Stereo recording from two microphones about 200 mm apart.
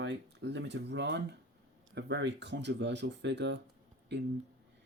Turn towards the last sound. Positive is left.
turn(degrees=-60)  # may be behind; listen again after turning